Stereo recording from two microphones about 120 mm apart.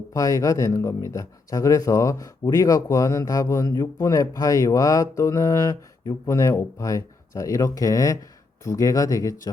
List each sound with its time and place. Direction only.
0.1 s speech: 30° left (ahead or behind)